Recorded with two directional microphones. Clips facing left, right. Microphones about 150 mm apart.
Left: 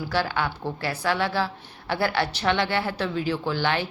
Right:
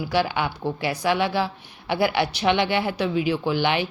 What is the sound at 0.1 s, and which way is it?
Speech, 15° right (ahead or behind).